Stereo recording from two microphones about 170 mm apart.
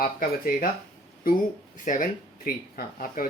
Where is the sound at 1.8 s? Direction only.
55° left (ahead or behind).